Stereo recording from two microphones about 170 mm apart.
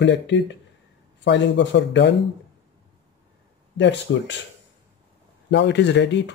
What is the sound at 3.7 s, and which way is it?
Speech, 90° left.